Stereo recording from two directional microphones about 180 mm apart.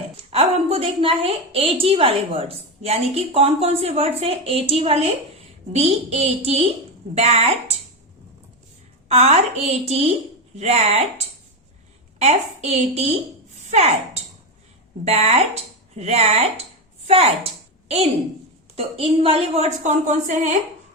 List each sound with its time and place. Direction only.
0.3 s a woman's voice: 35° right (ahead or behind)
9.0 s a woman's voice: 35° right (ahead or behind)
12.2 s a woman's voice: 35° right (ahead or behind)